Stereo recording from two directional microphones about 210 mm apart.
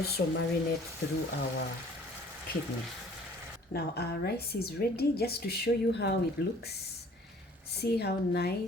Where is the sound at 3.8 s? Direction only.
50° left (ahead or behind).